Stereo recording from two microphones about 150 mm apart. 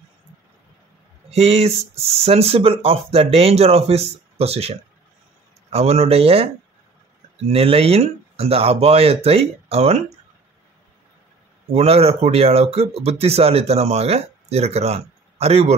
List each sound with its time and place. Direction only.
1.3 s speech: 45° right (ahead or behind)
11.7 s speech: 45° right (ahead or behind)